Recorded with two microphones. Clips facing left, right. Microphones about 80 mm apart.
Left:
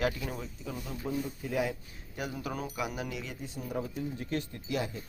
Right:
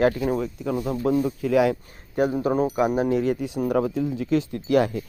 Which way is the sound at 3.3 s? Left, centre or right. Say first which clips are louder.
Right 14 dB; right.